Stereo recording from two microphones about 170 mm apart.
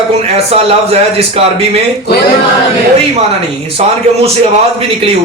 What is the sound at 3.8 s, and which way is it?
Speech, 40° right (ahead or behind).